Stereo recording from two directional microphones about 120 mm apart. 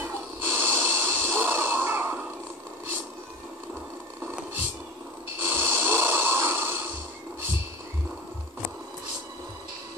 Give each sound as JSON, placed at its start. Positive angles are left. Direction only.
{"t": 0.0, "sound": "snort", "side_deg": -20}
{"t": 5.4, "sound": "snoring", "side_deg": -20}